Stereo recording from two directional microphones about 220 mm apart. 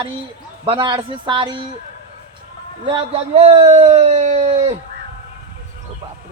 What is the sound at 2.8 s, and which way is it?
A man's voice, 25° right (ahead or behind).